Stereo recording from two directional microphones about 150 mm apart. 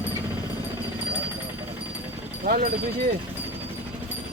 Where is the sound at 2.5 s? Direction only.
90° right.